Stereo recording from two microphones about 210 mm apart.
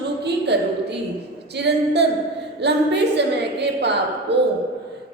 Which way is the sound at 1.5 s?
55° right (ahead or behind).